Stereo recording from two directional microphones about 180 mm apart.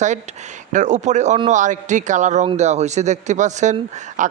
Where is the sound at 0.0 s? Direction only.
40° right (ahead or behind).